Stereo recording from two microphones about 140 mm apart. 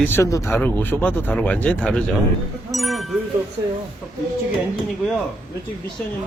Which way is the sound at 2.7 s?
Centre (ahead or behind).